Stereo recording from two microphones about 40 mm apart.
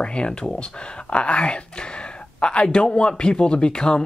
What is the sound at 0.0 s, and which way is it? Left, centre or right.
Speech, left.